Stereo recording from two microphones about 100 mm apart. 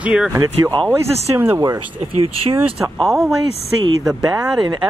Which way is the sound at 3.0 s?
5° right (ahead or behind).